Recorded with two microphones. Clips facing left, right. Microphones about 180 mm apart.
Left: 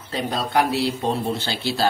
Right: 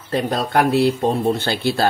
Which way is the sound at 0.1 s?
50° right (ahead or behind).